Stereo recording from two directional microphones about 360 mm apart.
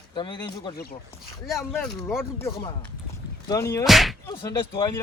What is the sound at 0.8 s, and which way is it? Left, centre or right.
Speech, left.